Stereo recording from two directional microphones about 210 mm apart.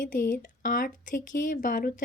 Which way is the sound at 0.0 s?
40° left (ahead or behind).